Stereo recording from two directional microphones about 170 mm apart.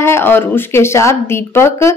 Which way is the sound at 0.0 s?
15° left (ahead or behind).